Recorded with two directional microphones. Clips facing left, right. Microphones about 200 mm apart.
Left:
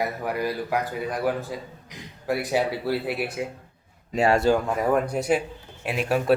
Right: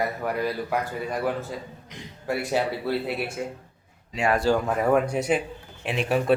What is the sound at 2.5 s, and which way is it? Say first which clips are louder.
Speech: even; 5° left (ahead or behind).